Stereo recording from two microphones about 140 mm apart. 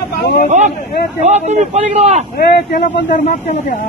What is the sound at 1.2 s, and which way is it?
Speech, 55° right (ahead or behind).